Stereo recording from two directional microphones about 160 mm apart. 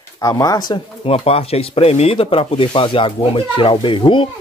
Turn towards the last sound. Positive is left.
turn(degrees=35)  # may be behind; listen again after turning